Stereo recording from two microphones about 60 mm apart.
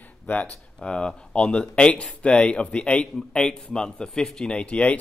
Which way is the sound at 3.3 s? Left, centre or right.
Centre.